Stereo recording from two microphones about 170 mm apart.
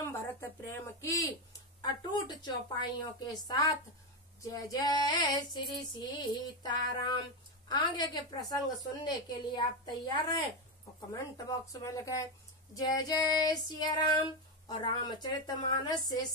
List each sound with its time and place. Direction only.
0.0 s speech: 15° left (ahead or behind)
1.8 s female singing: 25° left (ahead or behind)